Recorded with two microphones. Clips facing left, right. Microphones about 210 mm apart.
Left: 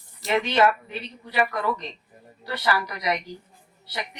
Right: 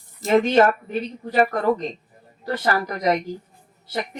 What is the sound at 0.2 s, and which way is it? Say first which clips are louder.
A woman's voice: right 5 dB; 45° right (ahead or behind).